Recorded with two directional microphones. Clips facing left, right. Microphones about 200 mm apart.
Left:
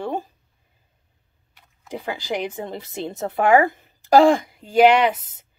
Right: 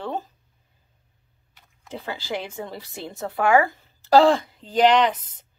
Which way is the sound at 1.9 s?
15° left (ahead or behind).